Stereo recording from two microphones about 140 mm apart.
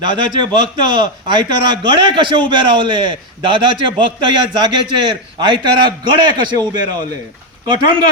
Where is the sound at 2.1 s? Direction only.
35° right (ahead or behind).